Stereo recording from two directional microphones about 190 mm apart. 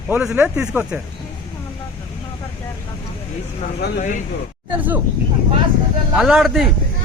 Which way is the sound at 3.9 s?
40° left (ahead or behind).